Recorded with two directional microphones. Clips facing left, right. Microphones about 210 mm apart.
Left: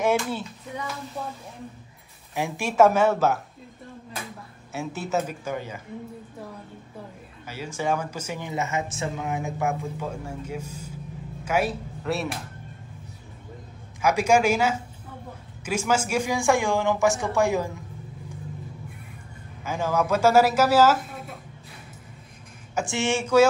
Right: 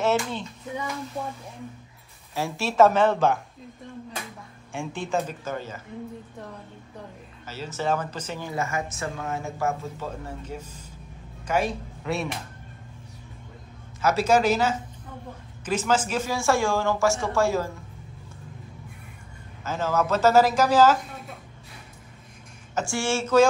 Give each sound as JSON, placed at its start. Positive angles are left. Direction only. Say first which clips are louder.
{"t": 0.0, "sound": "speech", "louder": "left 1 dB", "side_deg": 10}
{"t": 2.3, "sound": "speech", "louder": "even", "side_deg": 15}
{"t": 4.7, "sound": "speech", "louder": "left 1 dB", "side_deg": 5}
{"t": 7.4, "sound": "speech", "louder": "even", "side_deg": 10}
{"t": 8.5, "sound": "speech", "louder": "left 1 dB", "side_deg": 20}
{"t": 14.0, "sound": "speech", "louder": "even", "side_deg": 10}
{"t": 19.6, "sound": "speech", "louder": "even", "side_deg": 10}
{"t": 22.8, "sound": "speech", "louder": "left 1 dB", "side_deg": 20}